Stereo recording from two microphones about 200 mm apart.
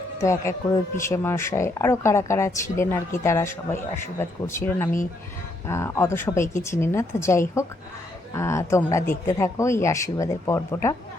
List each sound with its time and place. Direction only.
0.2 s speech: 15° left (ahead or behind)